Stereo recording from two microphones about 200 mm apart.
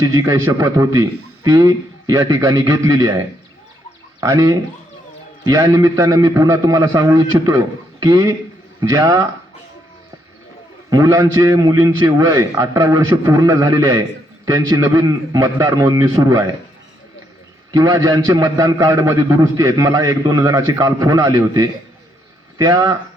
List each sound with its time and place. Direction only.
0.1 s a man's voice: 15° right (ahead or behind)
4.2 s a man's voice: 15° right (ahead or behind)
10.8 s a man's voice: 15° right (ahead or behind)
17.7 s a man's voice: 15° right (ahead or behind)